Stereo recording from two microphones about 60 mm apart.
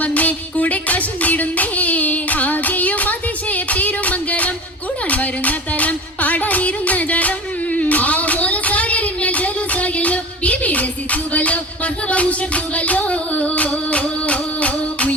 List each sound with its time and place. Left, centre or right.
0.0 s music: left